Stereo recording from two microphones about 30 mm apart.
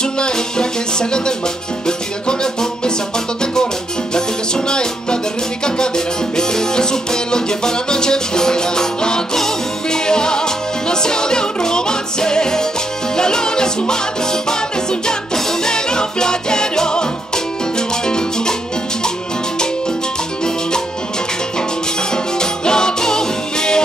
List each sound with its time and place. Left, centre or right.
0.0 s music: left
4.1 s music: left
22.1 s music: left